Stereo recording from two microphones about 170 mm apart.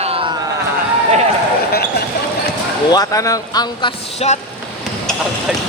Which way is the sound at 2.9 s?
20° left (ahead or behind).